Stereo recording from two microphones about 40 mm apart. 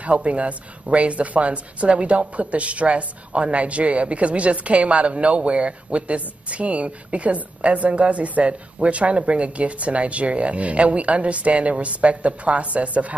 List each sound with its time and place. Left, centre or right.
0.0 s speech: right